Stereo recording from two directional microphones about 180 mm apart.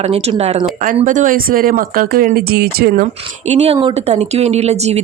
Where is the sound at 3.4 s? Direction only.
35° right (ahead or behind).